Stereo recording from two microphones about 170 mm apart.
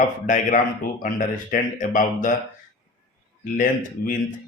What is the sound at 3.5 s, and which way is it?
Speech, 50° left (ahead or behind).